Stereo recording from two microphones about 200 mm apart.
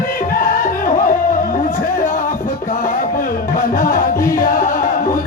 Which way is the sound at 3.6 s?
45° left (ahead or behind).